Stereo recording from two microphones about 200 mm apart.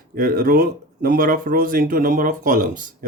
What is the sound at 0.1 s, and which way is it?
Speech, 45° right (ahead or behind).